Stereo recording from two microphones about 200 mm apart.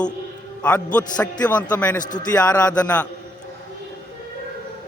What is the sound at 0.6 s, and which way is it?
Speech, 5° left (ahead or behind).